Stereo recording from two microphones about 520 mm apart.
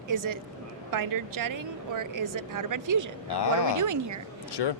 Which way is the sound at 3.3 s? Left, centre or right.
Left.